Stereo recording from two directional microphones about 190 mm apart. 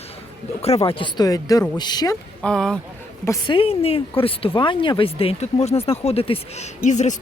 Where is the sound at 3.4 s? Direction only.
30° left (ahead or behind).